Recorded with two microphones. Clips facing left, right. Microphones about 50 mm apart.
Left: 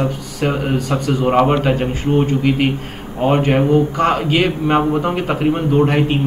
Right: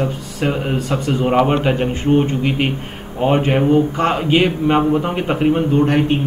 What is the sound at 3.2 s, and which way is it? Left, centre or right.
Speech, centre.